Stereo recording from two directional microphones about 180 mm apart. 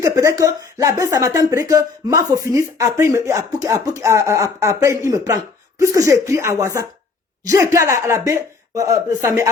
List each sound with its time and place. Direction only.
0.0 s speech: 15° right (ahead or behind)